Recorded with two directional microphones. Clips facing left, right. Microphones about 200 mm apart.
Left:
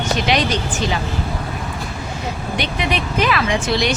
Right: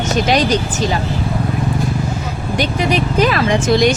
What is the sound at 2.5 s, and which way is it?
Speech, 40° right (ahead or behind).